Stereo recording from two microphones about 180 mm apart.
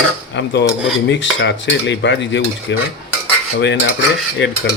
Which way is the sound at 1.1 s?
85° left.